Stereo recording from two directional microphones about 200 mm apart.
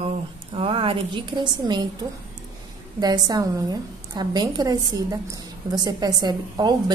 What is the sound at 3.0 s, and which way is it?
Speech, 20° right (ahead or behind).